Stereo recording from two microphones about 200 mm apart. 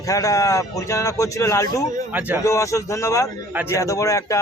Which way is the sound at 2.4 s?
15° left (ahead or behind).